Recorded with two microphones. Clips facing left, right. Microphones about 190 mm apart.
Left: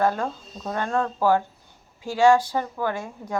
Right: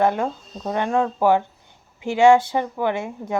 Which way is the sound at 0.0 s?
20° right (ahead or behind).